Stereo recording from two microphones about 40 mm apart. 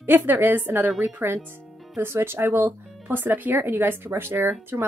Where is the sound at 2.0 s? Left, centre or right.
Right.